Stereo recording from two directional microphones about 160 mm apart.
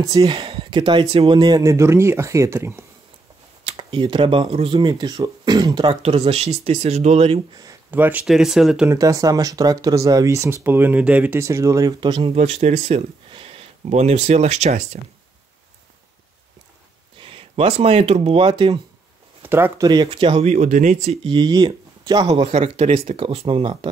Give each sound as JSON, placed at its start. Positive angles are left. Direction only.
{"t": 0.0, "sound": "speech", "side_deg": -20}
{"t": 0.4, "sound": "speech", "side_deg": -35}
{"t": 3.6, "sound": "speech", "side_deg": -35}
{"t": 4.7, "sound": "speech", "side_deg": -25}
{"t": 7.9, "sound": "speech", "side_deg": -10}
{"t": 8.8, "sound": "speech", "side_deg": -20}
{"t": 17.2, "sound": "speech", "side_deg": -35}
{"t": 19.4, "sound": "speech", "side_deg": -15}
{"t": 19.9, "sound": "speech", "side_deg": -30}
{"t": 22.3, "sound": "speech", "side_deg": -40}